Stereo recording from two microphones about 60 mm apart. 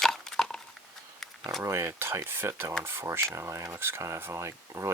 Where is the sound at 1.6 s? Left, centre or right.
Right.